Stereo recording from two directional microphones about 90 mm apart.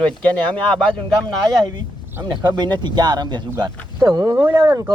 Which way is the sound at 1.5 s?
50° right (ahead or behind).